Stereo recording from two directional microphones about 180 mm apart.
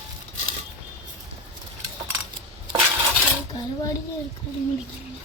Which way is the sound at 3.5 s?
20° left (ahead or behind).